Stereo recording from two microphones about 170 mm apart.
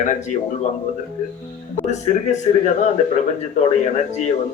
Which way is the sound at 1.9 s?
45° left (ahead or behind).